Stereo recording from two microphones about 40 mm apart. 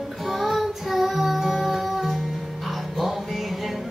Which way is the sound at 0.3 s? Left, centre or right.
Centre.